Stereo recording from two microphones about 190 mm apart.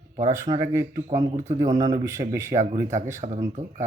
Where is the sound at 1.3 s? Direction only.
40° right (ahead or behind).